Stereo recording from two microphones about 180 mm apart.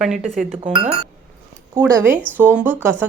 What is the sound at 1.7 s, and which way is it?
Speech, 10° right (ahead or behind).